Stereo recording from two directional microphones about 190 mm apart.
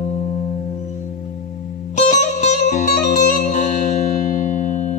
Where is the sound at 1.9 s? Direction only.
40° left (ahead or behind).